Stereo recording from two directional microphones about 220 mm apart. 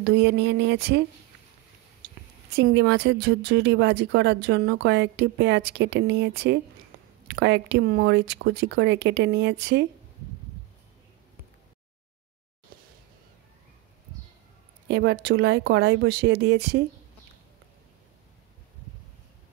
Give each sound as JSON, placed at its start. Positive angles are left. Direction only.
{"t": 0.0, "sound": "speech", "side_deg": -50}
{"t": 2.0, "sound": "a sound", "side_deg": -40}
{"t": 2.5, "sound": "speech", "side_deg": -50}
{"t": 14.9, "sound": "speech", "side_deg": -50}